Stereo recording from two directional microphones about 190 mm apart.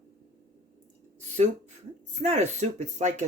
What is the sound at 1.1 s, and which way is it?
Speech, 35° right (ahead or behind).